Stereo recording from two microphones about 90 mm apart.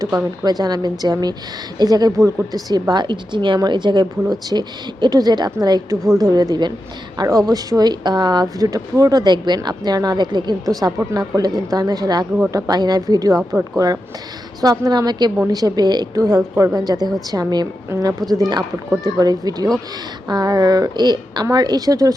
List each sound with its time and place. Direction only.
0.4 s a woman's voice: 45° right (ahead or behind)